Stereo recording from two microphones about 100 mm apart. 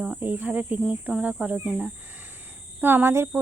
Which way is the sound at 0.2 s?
15° right (ahead or behind).